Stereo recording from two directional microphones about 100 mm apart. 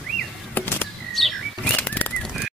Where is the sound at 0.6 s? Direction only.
20° left (ahead or behind).